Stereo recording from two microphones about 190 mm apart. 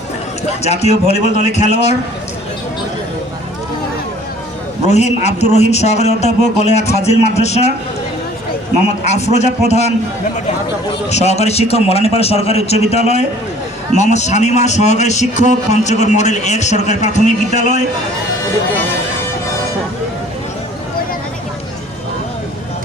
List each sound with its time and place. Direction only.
0.6 s a man's voice: 35° left (ahead or behind)
4.9 s a man's voice: 35° left (ahead or behind)
9.0 s a man's voice: 35° left (ahead or behind)
11.1 s a man's voice: 35° left (ahead or behind)